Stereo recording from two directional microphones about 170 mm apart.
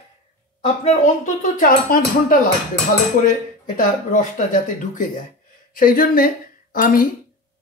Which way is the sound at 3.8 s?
45° left (ahead or behind).